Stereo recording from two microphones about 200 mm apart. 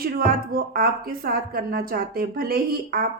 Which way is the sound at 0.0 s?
45° right (ahead or behind).